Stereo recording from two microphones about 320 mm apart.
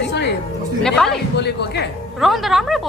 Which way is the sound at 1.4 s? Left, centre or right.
Left.